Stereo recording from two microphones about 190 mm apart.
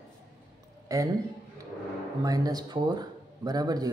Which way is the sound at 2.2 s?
20° right (ahead or behind).